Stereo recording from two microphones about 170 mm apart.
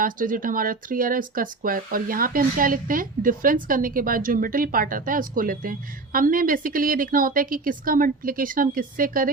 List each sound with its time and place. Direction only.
0.0 s speech: 55° right (ahead or behind)